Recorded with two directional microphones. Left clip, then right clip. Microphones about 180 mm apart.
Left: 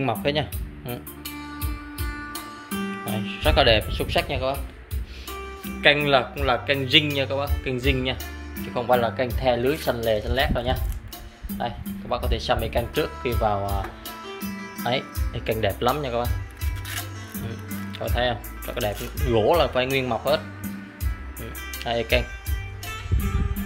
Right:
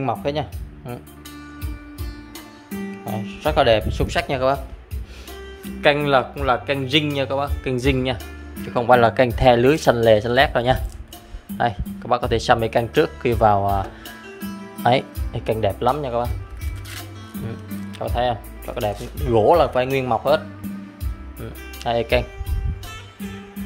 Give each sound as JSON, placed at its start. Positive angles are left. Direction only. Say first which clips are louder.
{"t": 0.0, "sound": "speech", "louder": "right 1 dB", "side_deg": -5}
{"t": 2.8, "sound": "music", "louder": "right 1 dB", "side_deg": -10}
{"t": 3.4, "sound": "speech", "louder": "right 2 dB", "side_deg": -15}
{"t": 3.9, "sound": "speech", "louder": "right 2 dB", "side_deg": -30}
{"t": 5.8, "sound": "speech", "louder": "right 2 dB", "side_deg": -20}
{"t": 8.6, "sound": "speech", "louder": "right 7 dB", "side_deg": -45}
{"t": 14.8, "sound": "speech", "louder": "right 8 dB", "side_deg": -40}
{"t": 15.3, "sound": "speech", "louder": "right 3 dB", "side_deg": -20}
{"t": 17.5, "sound": "speech", "louder": "right 1 dB", "side_deg": -20}